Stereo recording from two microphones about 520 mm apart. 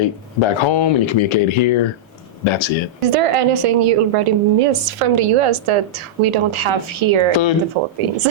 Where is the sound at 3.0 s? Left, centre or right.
Right.